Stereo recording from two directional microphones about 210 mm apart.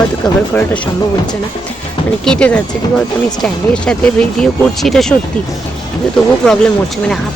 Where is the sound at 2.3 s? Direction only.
5° left (ahead or behind).